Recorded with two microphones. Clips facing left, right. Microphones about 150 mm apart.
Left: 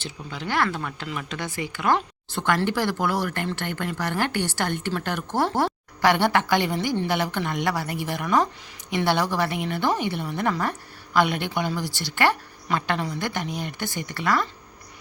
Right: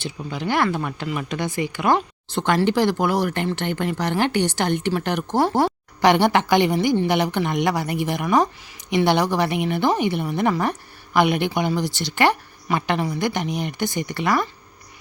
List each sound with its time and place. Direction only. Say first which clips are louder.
0.0 s a woman's voice: right 6 dB; 15° right (ahead or behind)